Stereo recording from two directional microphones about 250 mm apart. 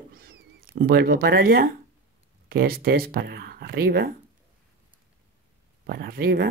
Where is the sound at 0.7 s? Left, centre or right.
Right.